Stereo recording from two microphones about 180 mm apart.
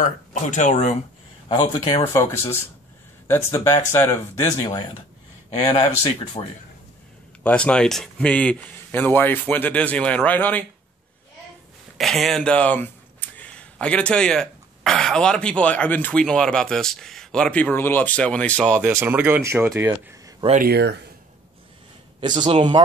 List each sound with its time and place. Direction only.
0.0 s speech: 45° left (ahead or behind)
1.5 s a man's voice: 25° left (ahead or behind)
6.4 s a man's voice: 30° left (ahead or behind)
7.4 s a man's voice: 5° left (ahead or behind)
12.0 s speech: centre (ahead or behind)
18.8 s speech: 10° right (ahead or behind)
20.5 s speech: 60° right (ahead or behind)
22.2 s a man's voice: 25° right (ahead or behind)